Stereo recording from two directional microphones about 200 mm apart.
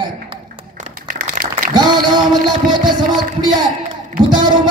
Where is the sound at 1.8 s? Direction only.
20° right (ahead or behind).